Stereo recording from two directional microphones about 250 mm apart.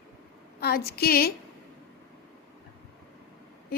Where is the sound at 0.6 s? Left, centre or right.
Left.